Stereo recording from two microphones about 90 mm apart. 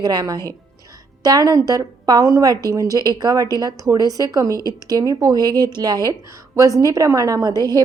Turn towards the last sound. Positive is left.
turn(degrees=-45)  # may be behind; listen again after turning